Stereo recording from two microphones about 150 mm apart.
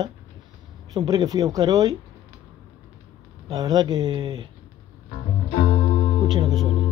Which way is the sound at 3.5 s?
25° right (ahead or behind).